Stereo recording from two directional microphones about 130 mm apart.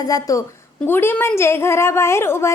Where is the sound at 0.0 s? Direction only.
25° left (ahead or behind).